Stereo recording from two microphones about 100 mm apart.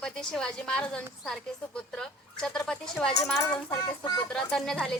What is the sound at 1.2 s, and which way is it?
Speech, 5° left (ahead or behind).